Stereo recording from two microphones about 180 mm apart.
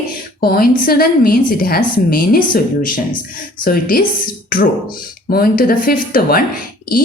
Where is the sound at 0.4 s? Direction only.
55° left (ahead or behind).